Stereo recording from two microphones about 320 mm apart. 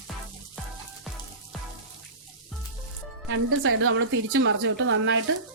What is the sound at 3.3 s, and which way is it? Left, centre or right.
Speech, right.